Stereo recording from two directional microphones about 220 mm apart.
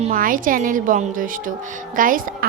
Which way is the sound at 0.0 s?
40° right (ahead or behind).